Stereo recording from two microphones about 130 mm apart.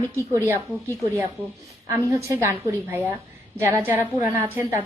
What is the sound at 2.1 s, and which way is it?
A woman's voice, 25° right (ahead or behind).